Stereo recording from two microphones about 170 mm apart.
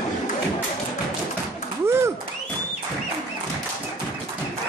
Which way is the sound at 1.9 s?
15° right (ahead or behind).